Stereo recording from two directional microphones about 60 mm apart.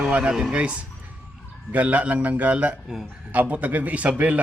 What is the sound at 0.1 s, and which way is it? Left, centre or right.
A man's voice, right.